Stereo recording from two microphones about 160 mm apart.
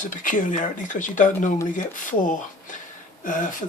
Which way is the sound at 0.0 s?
55° left (ahead or behind).